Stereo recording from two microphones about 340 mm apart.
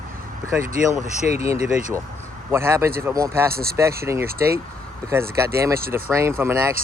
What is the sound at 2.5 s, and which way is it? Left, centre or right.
Speech, centre.